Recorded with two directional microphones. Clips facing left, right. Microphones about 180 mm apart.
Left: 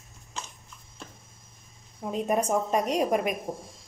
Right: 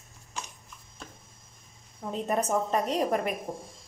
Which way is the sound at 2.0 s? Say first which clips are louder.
Left 2 dB; 15° left (ahead or behind).